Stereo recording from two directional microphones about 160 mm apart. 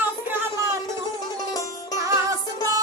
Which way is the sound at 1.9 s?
20° right (ahead or behind).